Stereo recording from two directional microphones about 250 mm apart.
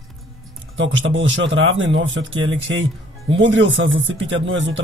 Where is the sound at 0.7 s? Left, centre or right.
Right.